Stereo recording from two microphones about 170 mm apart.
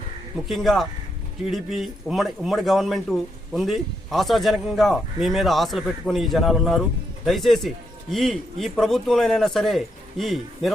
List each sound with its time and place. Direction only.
0.4 s a man's voice: centre (ahead or behind)